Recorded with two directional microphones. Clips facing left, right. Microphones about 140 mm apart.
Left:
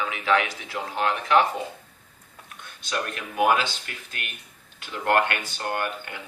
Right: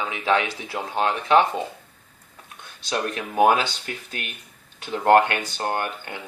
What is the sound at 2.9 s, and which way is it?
Speech, 35° right (ahead or behind).